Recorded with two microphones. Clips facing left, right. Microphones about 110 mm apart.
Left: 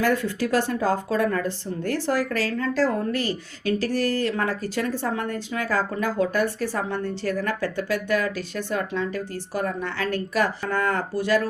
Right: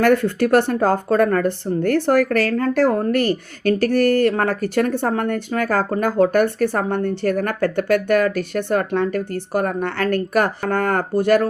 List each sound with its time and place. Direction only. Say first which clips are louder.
0.0 s speech: right 7 dB; 55° right (ahead or behind)